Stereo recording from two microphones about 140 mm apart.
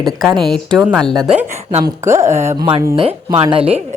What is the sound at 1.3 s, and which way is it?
Speech, 10° right (ahead or behind).